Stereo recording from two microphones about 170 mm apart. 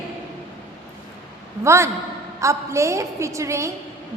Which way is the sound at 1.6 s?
15° right (ahead or behind).